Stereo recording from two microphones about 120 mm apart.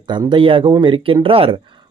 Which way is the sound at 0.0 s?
40° right (ahead or behind).